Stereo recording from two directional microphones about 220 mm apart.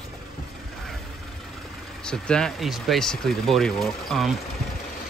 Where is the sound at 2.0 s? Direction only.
5° left (ahead or behind).